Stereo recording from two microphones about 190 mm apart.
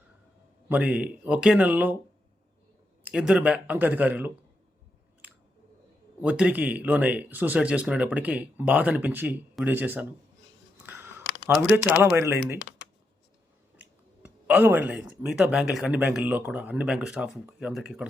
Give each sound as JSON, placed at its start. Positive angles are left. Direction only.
{"t": 0.7, "sound": "speech", "side_deg": -5}
{"t": 3.0, "sound": "speech", "side_deg": -5}
{"t": 6.2, "sound": "speech", "side_deg": -5}
{"t": 10.8, "sound": "a sound", "side_deg": -10}
{"t": 13.7, "sound": "speech", "side_deg": -5}